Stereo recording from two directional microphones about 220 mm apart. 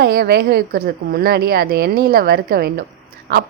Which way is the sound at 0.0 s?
45° right (ahead or behind).